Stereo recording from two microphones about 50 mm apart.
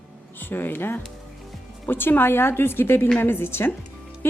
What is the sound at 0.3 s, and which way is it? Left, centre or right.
A woman's voice, left.